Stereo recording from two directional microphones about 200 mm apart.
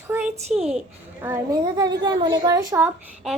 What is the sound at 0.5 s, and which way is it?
Speech, 30° right (ahead or behind).